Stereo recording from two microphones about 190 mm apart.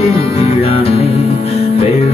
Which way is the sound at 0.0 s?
30° left (ahead or behind).